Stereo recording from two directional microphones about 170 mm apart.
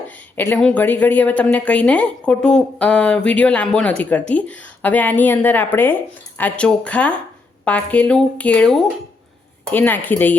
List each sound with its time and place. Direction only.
0.3 s speech: 10° left (ahead or behind)